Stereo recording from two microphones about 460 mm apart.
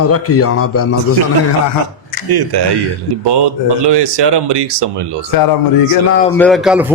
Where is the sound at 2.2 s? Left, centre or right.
Right.